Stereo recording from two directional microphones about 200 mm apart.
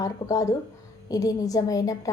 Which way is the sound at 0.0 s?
15° left (ahead or behind).